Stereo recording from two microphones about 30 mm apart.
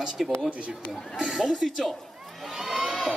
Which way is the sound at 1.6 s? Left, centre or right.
Centre.